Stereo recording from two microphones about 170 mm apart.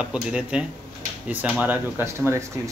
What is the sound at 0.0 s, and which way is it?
Speech, 5° right (ahead or behind).